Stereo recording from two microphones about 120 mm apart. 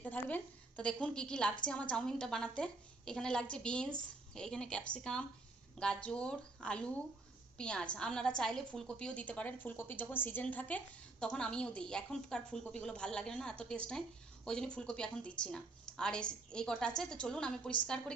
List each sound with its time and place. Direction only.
0.0 s a woman's voice: 15° left (ahead or behind)